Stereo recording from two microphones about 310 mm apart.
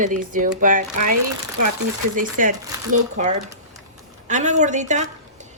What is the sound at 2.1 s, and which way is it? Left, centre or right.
A woman's voice, right.